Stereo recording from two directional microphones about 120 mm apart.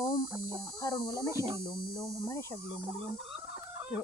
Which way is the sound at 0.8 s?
30° left (ahead or behind).